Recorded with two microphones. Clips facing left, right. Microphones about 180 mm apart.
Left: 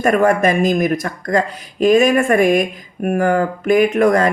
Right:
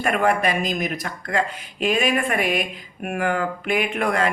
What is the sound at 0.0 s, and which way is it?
Speech, 45° left (ahead or behind).